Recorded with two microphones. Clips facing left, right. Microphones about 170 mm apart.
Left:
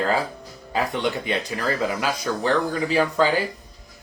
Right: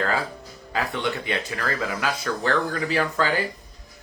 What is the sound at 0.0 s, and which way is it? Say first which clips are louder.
Speech: left 3 dB; 15° left (ahead or behind).